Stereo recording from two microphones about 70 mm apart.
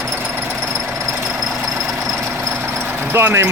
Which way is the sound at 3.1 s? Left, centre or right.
Right.